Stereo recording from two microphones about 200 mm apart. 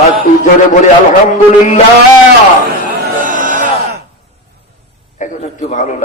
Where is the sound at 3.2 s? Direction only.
45° right (ahead or behind).